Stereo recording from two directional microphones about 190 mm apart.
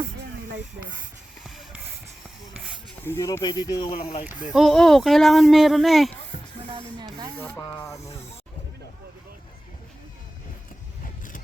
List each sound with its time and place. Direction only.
1.5 s a sound: centre (ahead or behind)
3.0 s speech: 15° left (ahead or behind); by 4.2 s 30° left (ahead or behind)
4.2 s speech: 10° right (ahead or behind)
6.7 s rub: 25° right (ahead or behind)
7.3 s speech: 5° left (ahead or behind)
7.6 s speech: 15° left (ahead or behind)